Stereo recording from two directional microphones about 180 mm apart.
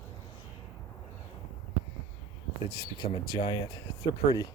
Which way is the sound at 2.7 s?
25° left (ahead or behind).